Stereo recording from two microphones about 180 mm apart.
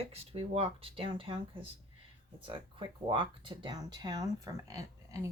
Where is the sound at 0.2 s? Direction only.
35° right (ahead or behind).